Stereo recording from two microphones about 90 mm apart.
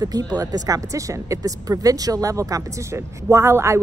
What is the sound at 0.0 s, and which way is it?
A woman's voice, 45° right (ahead or behind).